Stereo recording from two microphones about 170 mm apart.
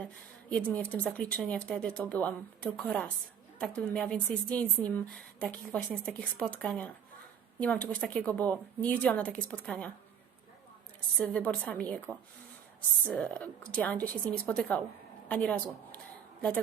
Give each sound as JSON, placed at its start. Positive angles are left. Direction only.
{"t": 0.5, "sound": "speech", "side_deg": 10}
{"t": 11.2, "sound": "speech", "side_deg": 10}